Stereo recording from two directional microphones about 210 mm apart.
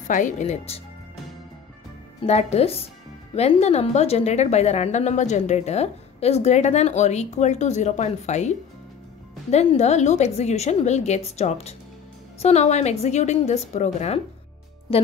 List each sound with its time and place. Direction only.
0.1 s a woman's voice: 35° left (ahead or behind)
2.2 s a woman's voice: 30° left (ahead or behind)